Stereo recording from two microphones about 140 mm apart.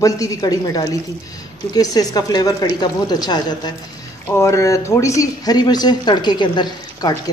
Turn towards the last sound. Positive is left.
turn(degrees=30)  # may be behind; listen again after turning